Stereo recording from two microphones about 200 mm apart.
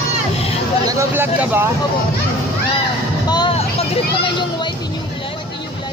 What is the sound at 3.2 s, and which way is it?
Vehicle, 20° left (ahead or behind).